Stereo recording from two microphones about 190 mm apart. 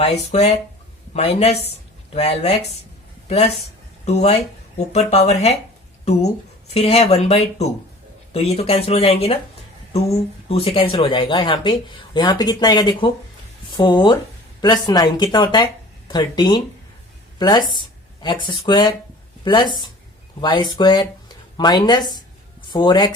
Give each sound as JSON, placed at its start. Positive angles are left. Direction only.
{"t": 0.0, "sound": "speech", "side_deg": 35}
{"t": 6.7, "sound": "speech", "side_deg": 35}